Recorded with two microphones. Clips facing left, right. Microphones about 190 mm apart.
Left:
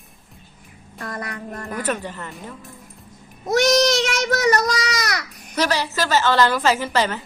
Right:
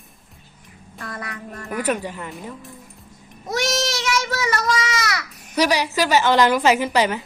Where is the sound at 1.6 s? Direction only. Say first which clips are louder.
Right 3 dB; 10° right (ahead or behind).